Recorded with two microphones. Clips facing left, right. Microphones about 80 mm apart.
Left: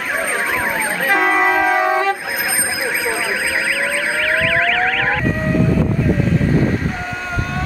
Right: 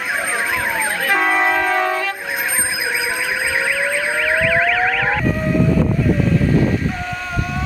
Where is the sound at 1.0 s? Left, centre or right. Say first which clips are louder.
Left 2 dB; centre.